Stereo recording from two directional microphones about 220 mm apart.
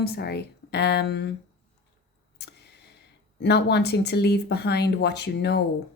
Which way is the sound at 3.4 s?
50° left (ahead or behind).